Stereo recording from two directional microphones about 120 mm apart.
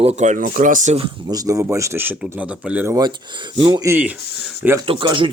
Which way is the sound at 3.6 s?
40° right (ahead or behind).